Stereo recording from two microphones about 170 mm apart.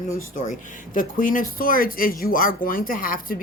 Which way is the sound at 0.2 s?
50° left (ahead or behind).